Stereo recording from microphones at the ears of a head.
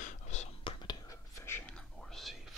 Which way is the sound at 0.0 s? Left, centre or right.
Left.